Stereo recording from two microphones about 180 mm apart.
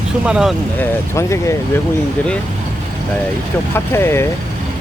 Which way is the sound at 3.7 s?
15° left (ahead or behind).